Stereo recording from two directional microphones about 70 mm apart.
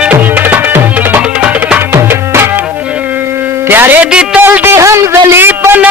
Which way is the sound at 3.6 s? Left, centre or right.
Right.